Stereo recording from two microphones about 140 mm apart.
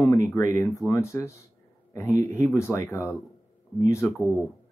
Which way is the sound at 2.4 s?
20° left (ahead or behind).